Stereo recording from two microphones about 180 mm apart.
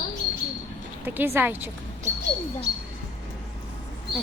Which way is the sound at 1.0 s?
10° right (ahead or behind).